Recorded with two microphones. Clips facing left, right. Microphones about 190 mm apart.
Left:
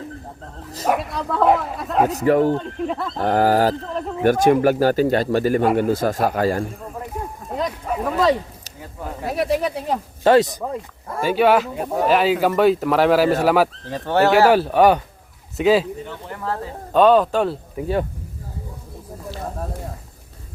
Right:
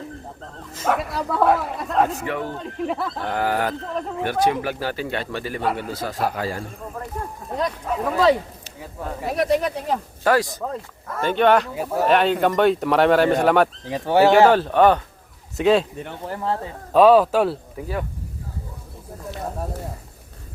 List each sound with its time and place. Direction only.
0.9 s speech: 5° right (ahead or behind)
2.0 s speech: 40° left (ahead or behind)
2.6 s speech: 5° right (ahead or behind)
3.2 s speech: 40° left (ahead or behind)
7.5 s speech: 5° left (ahead or behind)
10.2 s speech: 20° left (ahead or behind); by 13.7 s 5° left (ahead or behind)
13.8 s speech: 10° right (ahead or behind)
14.3 s speech: 5° left (ahead or behind)
16.2 s speech: 30° right (ahead or behind)
16.9 s speech: 5° right (ahead or behind)